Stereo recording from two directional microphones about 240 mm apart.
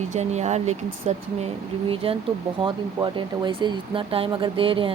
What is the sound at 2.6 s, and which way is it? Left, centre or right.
Speech, centre.